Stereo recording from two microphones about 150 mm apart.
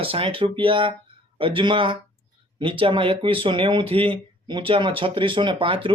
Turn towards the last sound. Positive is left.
turn(degrees=-35)  # may be behind; listen again after turning